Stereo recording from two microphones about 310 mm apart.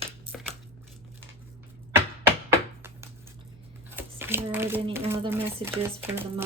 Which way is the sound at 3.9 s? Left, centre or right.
Centre.